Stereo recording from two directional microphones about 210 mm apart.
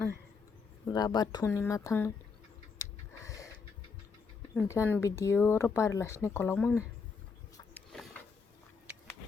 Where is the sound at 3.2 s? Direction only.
15° left (ahead or behind).